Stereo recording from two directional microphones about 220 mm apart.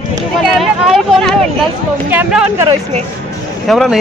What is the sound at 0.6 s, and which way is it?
Speech, centre (ahead or behind).